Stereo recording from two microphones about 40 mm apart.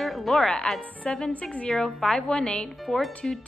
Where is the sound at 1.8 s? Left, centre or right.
Centre.